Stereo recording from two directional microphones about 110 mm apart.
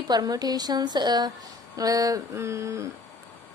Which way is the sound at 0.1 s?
35° right (ahead or behind).